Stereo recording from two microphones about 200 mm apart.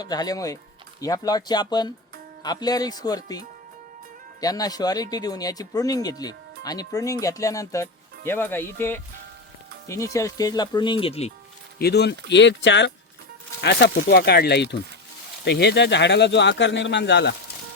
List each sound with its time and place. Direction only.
0.0 s speech: 20° left (ahead or behind)
11.8 s speech: 55° left (ahead or behind)